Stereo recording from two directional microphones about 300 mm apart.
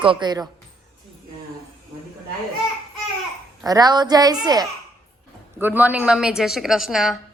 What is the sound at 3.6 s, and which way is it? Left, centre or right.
A child's voice, centre.